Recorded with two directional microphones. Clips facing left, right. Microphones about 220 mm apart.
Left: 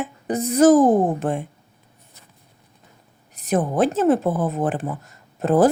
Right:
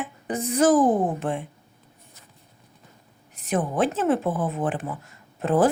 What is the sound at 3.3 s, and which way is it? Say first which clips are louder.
Speech: left 4 dB; 40° left (ahead or behind).